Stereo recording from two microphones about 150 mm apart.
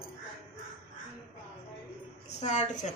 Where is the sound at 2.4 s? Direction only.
50° left (ahead or behind).